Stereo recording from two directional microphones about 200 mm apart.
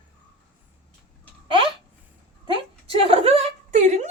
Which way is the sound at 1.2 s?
25° right (ahead or behind).